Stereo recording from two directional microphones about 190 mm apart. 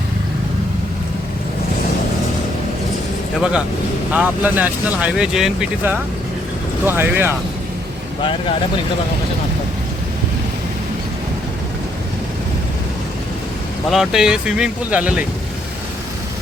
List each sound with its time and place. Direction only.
4.1 s speech: 10° right (ahead or behind)
8.2 s speech: 25° left (ahead or behind)
13.9 s speech: 5° right (ahead or behind)